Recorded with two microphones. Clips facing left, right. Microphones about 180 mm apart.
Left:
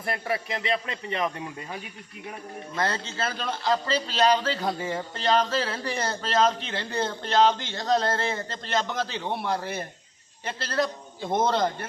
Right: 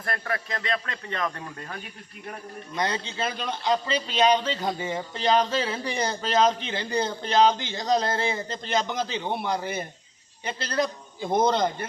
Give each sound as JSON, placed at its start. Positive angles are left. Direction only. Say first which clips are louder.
{"t": 0.0, "sound": "speech", "louder": "left 2 dB", "side_deg": 10}
{"t": 2.7, "sound": "a man's voice", "louder": "even", "side_deg": -15}
{"t": 4.6, "sound": "speech", "louder": "even", "side_deg": 0}